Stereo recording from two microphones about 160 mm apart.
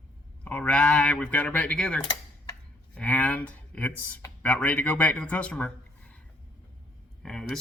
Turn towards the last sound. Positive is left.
turn(degrees=5)  # may be behind; listen again after turning